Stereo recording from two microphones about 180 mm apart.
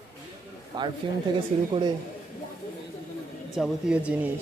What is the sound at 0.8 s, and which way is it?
Speech, 25° right (ahead or behind).